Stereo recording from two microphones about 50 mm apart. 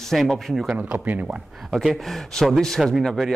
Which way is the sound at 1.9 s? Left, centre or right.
Centre.